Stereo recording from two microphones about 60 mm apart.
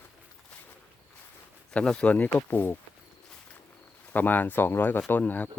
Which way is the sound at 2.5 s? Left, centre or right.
Left.